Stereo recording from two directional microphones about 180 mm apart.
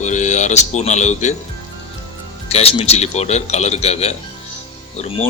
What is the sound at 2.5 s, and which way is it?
Speech, 35° left (ahead or behind).